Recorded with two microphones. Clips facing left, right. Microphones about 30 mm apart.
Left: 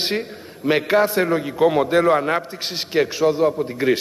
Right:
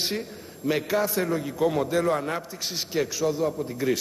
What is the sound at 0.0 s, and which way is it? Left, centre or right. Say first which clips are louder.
A man's voice: left 6 dB; left.